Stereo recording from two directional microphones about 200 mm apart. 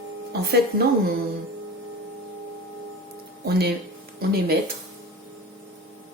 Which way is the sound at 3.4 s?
50° right (ahead or behind).